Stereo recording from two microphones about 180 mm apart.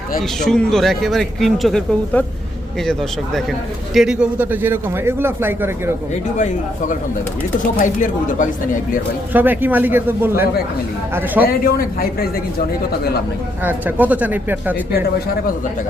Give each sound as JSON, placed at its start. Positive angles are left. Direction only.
{"t": 0.2, "sound": "speech", "side_deg": 5}
{"t": 3.9, "sound": "a man's voice", "side_deg": -5}
{"t": 6.3, "sound": "speech", "side_deg": 40}
{"t": 9.3, "sound": "a man's voice", "side_deg": -10}
{"t": 11.4, "sound": "a man's voice", "side_deg": 55}
{"t": 13.7, "sound": "a man's voice", "side_deg": -10}